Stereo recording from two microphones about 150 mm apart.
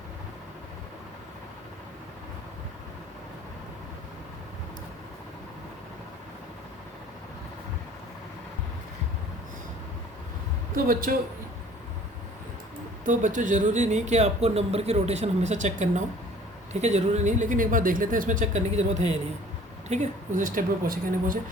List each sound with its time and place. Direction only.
10.8 s a man's voice: 70° right (ahead or behind)
13.1 s speech: 60° right (ahead or behind)